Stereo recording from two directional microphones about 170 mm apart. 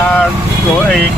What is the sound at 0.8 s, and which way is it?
Speech, 5° left (ahead or behind).